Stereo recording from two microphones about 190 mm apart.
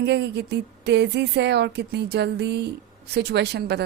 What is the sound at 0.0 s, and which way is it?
Speech, 65° right (ahead or behind).